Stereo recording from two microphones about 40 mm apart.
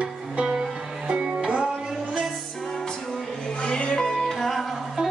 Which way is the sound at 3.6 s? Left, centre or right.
Left.